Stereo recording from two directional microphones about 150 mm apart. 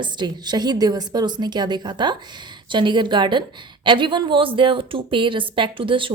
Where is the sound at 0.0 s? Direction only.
30° right (ahead or behind).